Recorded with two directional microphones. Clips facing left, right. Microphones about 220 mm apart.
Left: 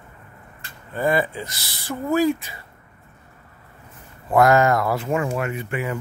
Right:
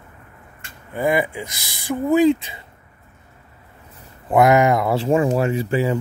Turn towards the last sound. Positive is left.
turn(degrees=-30)  # may be behind; listen again after turning